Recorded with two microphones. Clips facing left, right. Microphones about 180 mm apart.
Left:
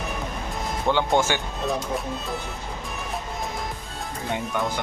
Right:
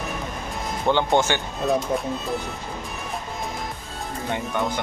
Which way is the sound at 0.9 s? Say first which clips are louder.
Right 2 dB; 20° right (ahead or behind).